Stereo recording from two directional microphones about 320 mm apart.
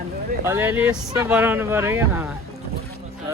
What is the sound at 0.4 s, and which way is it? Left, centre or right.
Speech, centre.